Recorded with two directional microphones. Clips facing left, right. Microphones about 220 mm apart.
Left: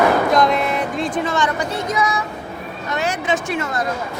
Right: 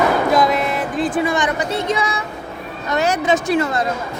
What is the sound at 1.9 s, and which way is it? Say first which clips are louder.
Speech: even; 30° right (ahead or behind).